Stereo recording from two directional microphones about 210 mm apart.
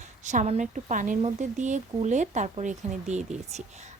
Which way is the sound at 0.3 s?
35° right (ahead or behind).